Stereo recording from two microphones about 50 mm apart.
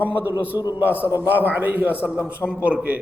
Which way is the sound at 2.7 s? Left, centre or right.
Right.